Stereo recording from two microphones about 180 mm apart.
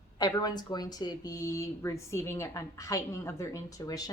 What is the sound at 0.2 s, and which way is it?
Speech, 20° left (ahead or behind).